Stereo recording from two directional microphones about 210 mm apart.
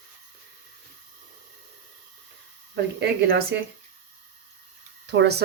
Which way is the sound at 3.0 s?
50° right (ahead or behind).